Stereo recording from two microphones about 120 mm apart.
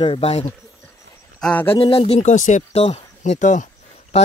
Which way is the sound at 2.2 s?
75° left (ahead or behind).